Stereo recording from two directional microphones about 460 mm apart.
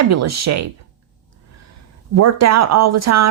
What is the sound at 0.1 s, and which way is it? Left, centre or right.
Speech, right.